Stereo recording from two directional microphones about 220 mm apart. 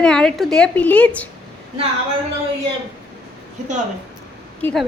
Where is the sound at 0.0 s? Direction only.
5° left (ahead or behind).